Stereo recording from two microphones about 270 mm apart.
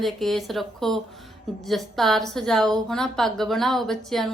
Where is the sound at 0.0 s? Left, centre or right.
Centre.